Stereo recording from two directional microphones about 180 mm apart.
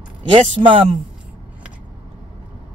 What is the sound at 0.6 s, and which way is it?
Speech, 30° right (ahead or behind).